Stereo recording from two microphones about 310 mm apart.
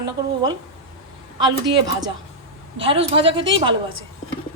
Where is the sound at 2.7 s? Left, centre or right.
Centre.